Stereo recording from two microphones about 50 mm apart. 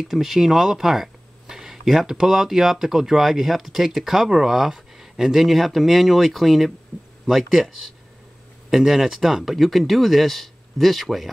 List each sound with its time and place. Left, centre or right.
0.0 s speech: centre
6.9 s a sound: right
7.2 s speech: centre